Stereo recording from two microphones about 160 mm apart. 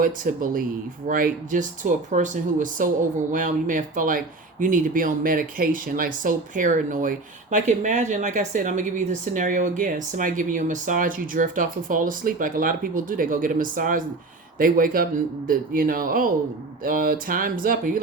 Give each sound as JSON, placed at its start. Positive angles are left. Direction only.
{"t": 0.0, "sound": "speech", "side_deg": -55}